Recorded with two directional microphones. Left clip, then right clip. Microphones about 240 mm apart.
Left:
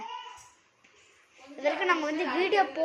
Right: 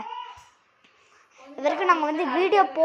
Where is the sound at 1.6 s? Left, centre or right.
Centre.